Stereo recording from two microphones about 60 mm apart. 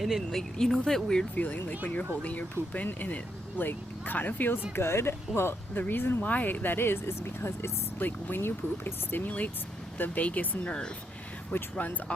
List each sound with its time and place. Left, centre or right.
0.0 s speech: centre
1.4 s speech: left
4.7 s speech: left
7.9 s speech: left; by 10.9 s centre
11.5 s speech: left